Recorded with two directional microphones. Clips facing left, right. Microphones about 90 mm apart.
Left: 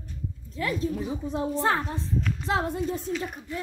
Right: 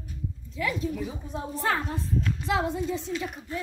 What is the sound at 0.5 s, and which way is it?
Speech, 40° left (ahead or behind).